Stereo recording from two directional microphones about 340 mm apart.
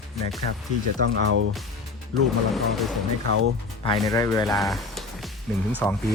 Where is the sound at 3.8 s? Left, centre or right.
Centre.